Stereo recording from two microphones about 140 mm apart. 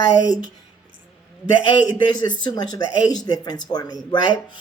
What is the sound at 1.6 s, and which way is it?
Speech, 35° left (ahead or behind).